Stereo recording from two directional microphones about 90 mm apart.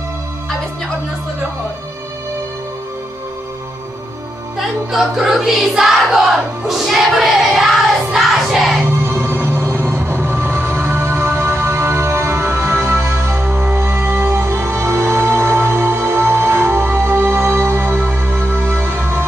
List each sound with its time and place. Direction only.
4.6 s music: 5° right (ahead or behind)
8.1 s crowd: 5° right (ahead or behind)
8.8 s music: 25° right (ahead or behind)